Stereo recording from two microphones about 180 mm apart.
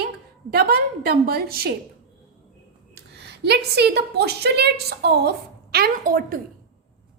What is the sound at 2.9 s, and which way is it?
A woman's voice, 65° right (ahead or behind).